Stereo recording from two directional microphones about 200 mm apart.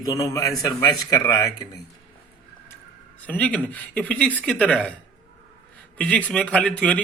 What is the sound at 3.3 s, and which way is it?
Speech, 5° left (ahead or behind).